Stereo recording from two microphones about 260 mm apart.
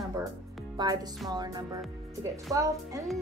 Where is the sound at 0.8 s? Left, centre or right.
Centre.